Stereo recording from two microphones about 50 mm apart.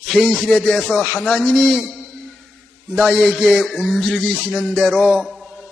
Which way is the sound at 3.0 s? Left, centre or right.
Centre.